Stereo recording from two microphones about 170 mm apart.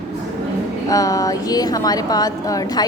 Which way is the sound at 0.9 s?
20° left (ahead or behind).